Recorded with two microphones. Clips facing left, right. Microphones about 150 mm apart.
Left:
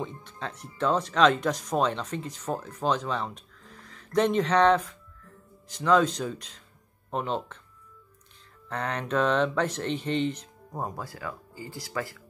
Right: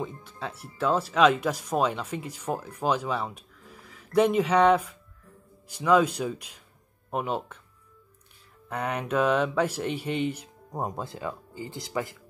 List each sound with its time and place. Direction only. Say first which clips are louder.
0.0 s speech: right 1 dB; 5° right (ahead or behind)
8.6 s speech: right 1 dB; 10° right (ahead or behind)